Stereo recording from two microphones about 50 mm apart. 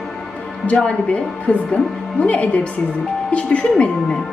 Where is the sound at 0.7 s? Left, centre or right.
Left.